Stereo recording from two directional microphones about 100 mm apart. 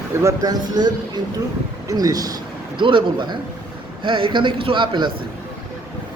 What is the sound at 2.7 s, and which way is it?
A man's voice, 55° right (ahead or behind).